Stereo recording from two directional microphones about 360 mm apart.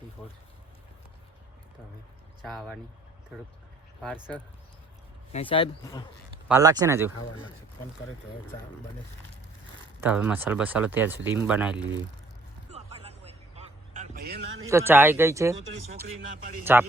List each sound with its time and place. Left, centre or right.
2.4 s speech: centre
5.3 s speech: centre
6.5 s speech: centre
10.0 s speech: centre
12.7 s a sound: centre
14.7 s speech: centre
16.7 s speech: centre